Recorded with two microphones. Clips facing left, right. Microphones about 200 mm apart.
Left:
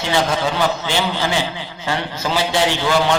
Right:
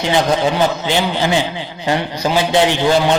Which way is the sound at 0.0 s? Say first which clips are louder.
Right 4 dB; 15° right (ahead or behind).